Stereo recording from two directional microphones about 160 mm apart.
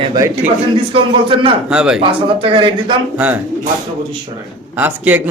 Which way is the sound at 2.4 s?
30° right (ahead or behind).